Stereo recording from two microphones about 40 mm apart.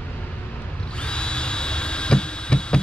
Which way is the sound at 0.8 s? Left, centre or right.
Left.